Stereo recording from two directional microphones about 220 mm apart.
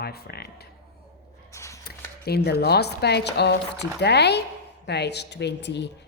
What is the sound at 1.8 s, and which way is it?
A woman's voice, 45° left (ahead or behind).